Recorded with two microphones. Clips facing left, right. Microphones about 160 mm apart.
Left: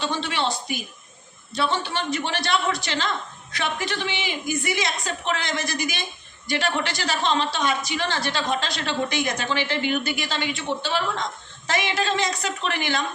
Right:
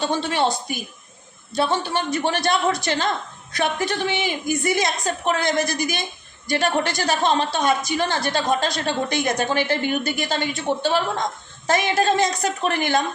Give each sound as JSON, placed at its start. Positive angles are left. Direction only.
{"t": 0.0, "sound": "a woman's voice", "side_deg": -45}
{"t": 1.5, "sound": "a woman's voice", "side_deg": -45}